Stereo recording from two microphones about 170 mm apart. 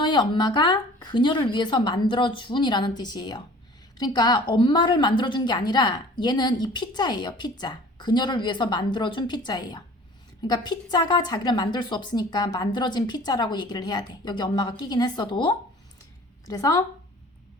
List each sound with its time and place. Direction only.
0.0 s a woman's voice: 25° left (ahead or behind)